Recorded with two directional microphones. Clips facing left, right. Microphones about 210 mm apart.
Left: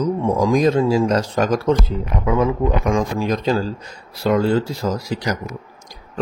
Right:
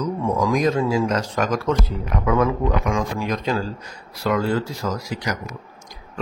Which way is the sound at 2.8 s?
35° left (ahead or behind).